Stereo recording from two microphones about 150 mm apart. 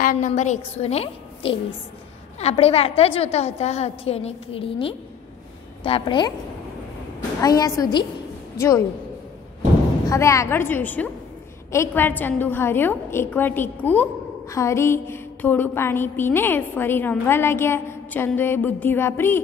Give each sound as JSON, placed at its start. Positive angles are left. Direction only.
{"t": 0.0, "sound": "a woman's voice", "side_deg": 60}
{"t": 0.3, "sound": "a woman's voice", "side_deg": 45}
{"t": 10.0, "sound": "a woman's voice", "side_deg": 20}